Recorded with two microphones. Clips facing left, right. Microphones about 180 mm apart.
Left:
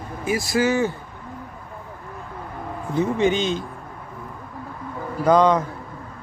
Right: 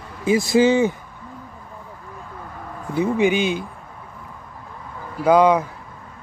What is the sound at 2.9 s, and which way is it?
Speech, 10° right (ahead or behind).